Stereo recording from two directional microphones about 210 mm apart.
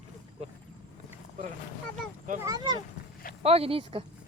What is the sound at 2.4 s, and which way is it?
Speech, 15° right (ahead or behind).